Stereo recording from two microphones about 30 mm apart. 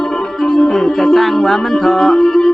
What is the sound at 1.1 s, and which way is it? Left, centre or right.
Music, centre.